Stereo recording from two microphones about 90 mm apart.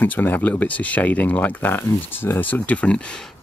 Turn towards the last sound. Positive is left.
turn(degrees=10)  # may be behind; listen again after turning